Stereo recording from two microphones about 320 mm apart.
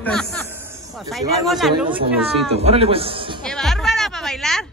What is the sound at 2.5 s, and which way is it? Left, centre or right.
Speech, centre.